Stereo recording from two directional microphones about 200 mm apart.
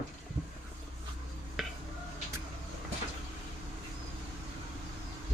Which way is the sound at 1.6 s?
Centre (ahead or behind).